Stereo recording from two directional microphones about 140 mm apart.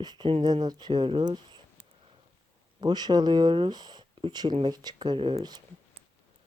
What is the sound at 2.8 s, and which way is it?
Speech, 30° right (ahead or behind).